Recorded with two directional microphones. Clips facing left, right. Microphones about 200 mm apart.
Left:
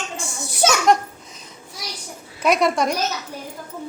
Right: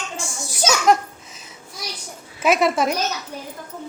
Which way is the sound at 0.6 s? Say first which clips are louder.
Left 2 dB; 60° left (ahead or behind).